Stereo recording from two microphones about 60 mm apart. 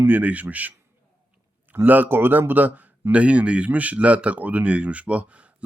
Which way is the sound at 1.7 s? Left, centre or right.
Right.